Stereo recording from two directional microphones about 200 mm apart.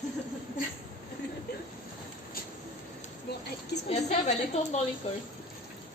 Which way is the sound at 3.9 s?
35° left (ahead or behind).